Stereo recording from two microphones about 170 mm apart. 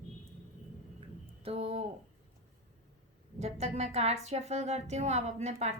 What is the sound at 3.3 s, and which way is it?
Speech, 40° right (ahead or behind).